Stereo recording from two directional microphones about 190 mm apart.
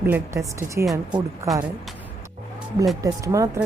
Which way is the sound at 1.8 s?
Centre (ahead or behind).